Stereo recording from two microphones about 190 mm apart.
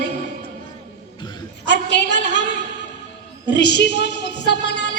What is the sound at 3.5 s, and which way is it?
A woman's voice, 65° left (ahead or behind).